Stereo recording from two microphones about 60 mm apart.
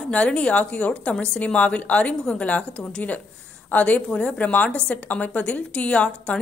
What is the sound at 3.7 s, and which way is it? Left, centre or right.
A woman's voice, left.